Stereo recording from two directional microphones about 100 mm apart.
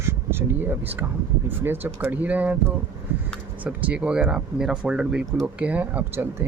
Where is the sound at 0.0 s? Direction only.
25° right (ahead or behind).